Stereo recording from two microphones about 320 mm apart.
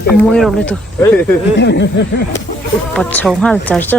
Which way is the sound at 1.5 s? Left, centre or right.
Left.